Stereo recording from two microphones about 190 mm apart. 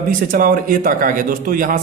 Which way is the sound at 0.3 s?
45° right (ahead or behind).